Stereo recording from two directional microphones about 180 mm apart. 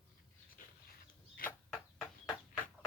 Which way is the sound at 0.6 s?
50° left (ahead or behind).